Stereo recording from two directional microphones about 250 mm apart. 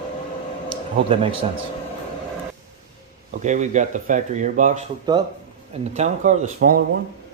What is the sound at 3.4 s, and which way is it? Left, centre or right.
Speech, right.